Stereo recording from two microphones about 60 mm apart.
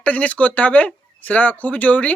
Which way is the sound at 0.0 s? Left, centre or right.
Left.